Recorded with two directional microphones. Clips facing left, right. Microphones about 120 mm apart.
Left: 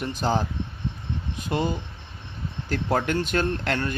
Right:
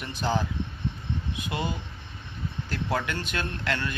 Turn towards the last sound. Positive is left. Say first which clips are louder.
# left 5 dB
turn(degrees=45)  # may be behind; listen again after turning